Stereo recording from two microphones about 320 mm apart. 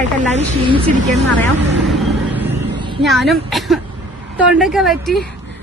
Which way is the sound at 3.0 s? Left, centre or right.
Centre.